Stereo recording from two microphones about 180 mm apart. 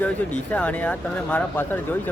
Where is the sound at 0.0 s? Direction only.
10° left (ahead or behind).